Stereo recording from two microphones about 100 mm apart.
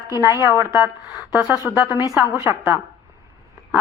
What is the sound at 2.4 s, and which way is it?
Speech, 25° right (ahead or behind).